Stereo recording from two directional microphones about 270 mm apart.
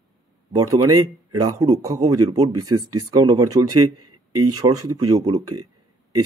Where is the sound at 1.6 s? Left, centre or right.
Centre.